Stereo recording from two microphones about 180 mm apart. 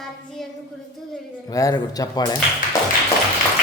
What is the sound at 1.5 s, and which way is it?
Speech, 20° left (ahead or behind).